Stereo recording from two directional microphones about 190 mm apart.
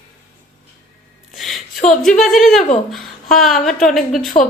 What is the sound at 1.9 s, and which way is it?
A woman's voice, centre (ahead or behind).